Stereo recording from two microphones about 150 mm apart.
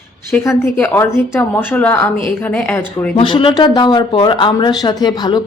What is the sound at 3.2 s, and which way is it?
Speech, 35° left (ahead or behind).